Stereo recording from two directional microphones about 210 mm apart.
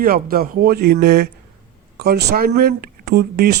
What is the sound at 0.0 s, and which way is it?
Speech, 45° right (ahead or behind).